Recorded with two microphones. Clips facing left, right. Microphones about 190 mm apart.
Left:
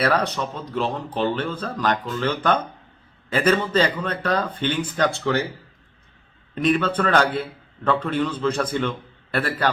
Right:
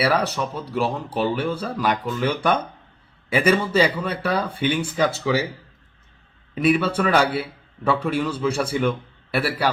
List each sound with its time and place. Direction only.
0.0 s speech: 10° right (ahead or behind)
6.5 s speech: 5° right (ahead or behind)